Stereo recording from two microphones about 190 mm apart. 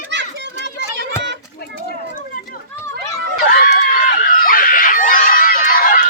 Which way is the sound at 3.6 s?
50° left (ahead or behind).